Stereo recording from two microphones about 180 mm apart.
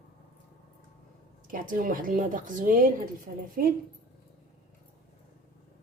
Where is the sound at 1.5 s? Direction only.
50° right (ahead or behind).